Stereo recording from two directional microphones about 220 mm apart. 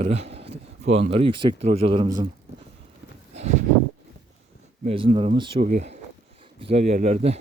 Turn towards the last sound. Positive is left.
turn(degrees=-30)  # may be behind; listen again after turning